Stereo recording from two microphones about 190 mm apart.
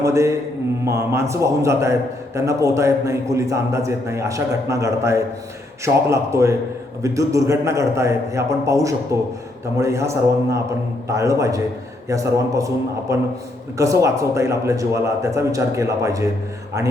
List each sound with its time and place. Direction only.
0.0 s a man's voice: 15° right (ahead or behind)